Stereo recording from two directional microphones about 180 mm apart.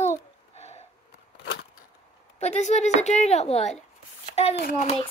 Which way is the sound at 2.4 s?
40° left (ahead or behind).